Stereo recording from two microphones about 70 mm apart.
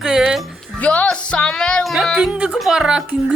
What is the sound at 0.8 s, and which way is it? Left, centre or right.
Music, centre.